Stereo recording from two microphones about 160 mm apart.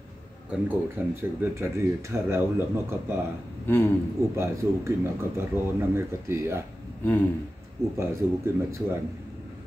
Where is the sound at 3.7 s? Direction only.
15° left (ahead or behind).